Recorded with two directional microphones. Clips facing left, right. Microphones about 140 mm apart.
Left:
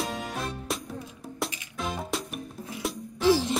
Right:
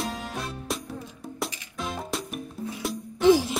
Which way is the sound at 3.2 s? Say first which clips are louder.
Right 4 dB; 15° right (ahead or behind).